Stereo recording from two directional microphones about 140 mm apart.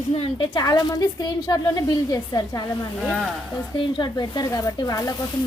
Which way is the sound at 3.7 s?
35° left (ahead or behind).